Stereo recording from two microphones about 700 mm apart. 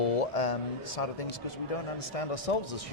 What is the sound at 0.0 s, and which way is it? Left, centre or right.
A man's voice, left.